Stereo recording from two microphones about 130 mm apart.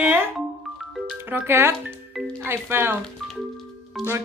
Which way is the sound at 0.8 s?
Centre (ahead or behind).